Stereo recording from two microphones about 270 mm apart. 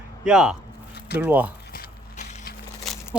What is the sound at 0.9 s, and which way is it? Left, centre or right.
Squish, left.